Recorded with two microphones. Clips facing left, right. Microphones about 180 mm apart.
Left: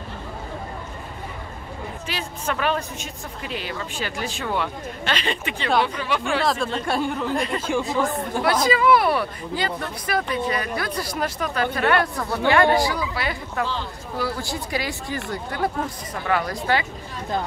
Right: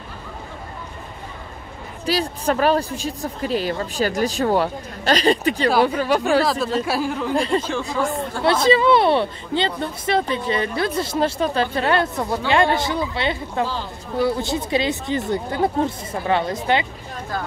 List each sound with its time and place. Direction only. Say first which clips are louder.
2.0 s speech: right 9 dB; 35° right (ahead or behind)
6.4 s speech: right 2 dB; centre (ahead or behind)
7.3 s speech: right 5 dB; 30° right (ahead or behind)
7.6 s speech: left 2 dB; 15° left (ahead or behind)
7.9 s speech: right 3 dB; centre (ahead or behind)
8.5 s speech: right 3 dB; 25° right (ahead or behind)